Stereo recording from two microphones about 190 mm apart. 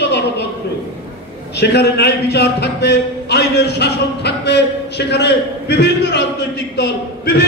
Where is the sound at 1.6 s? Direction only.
60° left (ahead or behind).